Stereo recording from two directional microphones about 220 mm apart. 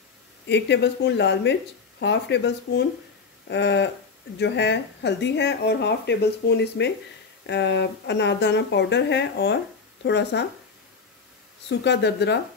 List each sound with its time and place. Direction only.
0.5 s speech: 50° left (ahead or behind)
11.8 s speech: 50° left (ahead or behind)